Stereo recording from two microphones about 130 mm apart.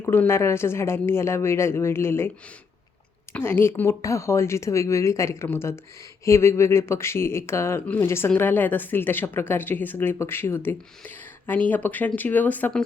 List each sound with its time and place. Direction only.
0.0 s speech: 15° left (ahead or behind)
3.3 s a woman's voice: 15° left (ahead or behind)